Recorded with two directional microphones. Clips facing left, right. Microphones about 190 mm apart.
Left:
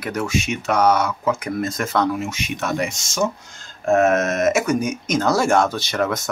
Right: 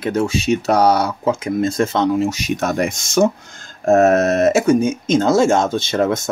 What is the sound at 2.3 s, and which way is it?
Speech, 40° right (ahead or behind).